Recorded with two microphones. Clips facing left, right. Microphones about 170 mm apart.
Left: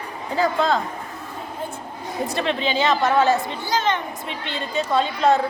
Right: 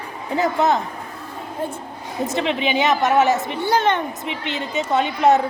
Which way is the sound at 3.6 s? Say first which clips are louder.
Right 4 dB; 55° right (ahead or behind).